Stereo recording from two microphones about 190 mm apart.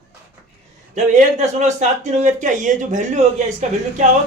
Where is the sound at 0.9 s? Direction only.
40° right (ahead or behind).